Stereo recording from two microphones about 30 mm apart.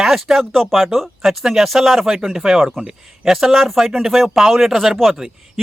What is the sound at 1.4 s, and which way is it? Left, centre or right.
Speech, centre.